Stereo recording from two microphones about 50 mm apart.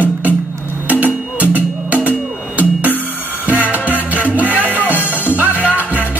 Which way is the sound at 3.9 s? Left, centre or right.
Right.